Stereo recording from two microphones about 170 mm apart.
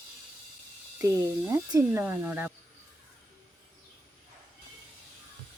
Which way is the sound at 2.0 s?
10° right (ahead or behind).